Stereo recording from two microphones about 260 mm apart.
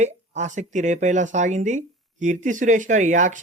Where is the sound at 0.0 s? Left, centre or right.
Right.